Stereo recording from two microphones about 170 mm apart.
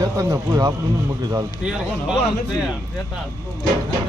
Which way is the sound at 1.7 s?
5° right (ahead or behind).